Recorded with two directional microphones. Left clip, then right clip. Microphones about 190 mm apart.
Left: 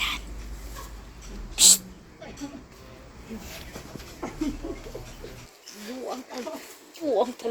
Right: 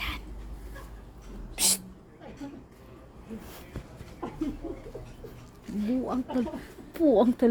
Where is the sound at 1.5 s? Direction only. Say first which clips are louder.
Left 9 dB; 30° right (ahead or behind).